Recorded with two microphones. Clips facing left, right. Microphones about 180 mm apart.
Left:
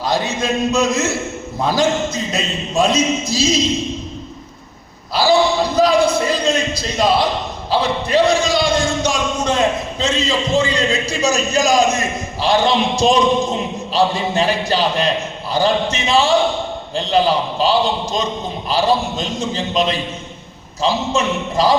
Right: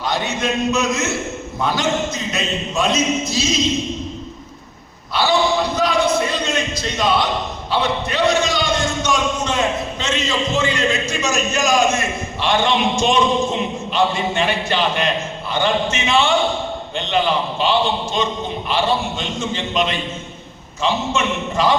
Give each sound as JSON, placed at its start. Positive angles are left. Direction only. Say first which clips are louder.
{"t": 0.0, "sound": "speech", "louder": "left 2 dB", "side_deg": 35}
{"t": 5.1, "sound": "speech", "louder": "left 3 dB", "side_deg": 35}